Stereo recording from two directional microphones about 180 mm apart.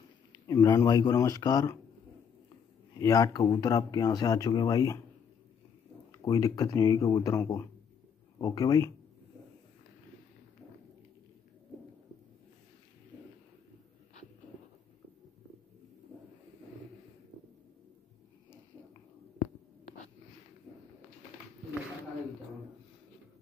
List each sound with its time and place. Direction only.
0.3 s speech: 15° left (ahead or behind)
3.0 s speech: 20° left (ahead or behind)
6.1 s speech: 20° left (ahead or behind)